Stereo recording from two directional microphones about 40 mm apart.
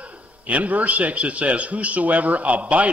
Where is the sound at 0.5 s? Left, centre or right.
Right.